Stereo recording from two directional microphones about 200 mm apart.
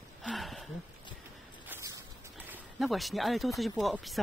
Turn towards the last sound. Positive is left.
turn(degrees=0)  # may be behind; listen again after turning